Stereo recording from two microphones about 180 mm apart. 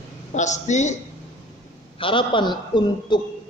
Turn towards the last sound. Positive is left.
turn(degrees=25)  # may be behind; listen again after turning